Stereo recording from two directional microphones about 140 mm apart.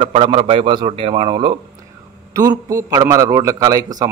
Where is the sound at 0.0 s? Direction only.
40° right (ahead or behind).